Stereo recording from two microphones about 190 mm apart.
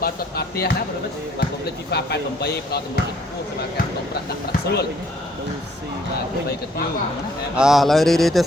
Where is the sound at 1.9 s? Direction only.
60° left (ahead or behind).